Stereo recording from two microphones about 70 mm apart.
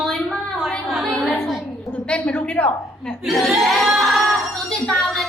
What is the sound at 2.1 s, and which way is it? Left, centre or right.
Speech, centre.